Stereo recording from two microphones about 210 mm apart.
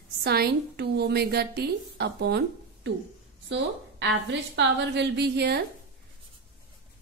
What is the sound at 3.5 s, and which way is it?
A woman's voice, 55° right (ahead or behind).